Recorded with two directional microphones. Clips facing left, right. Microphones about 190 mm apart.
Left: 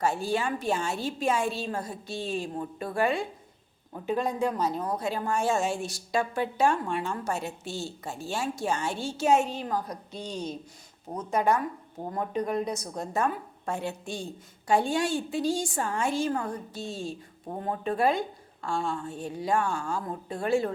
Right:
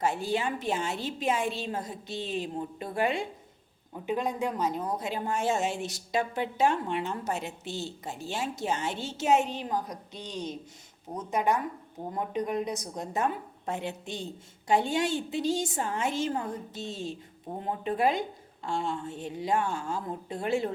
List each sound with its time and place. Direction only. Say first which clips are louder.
0.0 s speech: left 1 dB; 20° right (ahead or behind)